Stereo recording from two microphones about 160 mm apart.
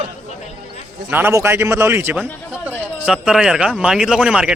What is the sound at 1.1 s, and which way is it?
A man's voice, 15° right (ahead or behind).